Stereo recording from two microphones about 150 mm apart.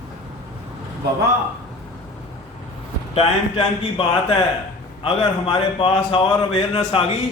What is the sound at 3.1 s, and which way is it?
A man's voice, 40° left (ahead or behind).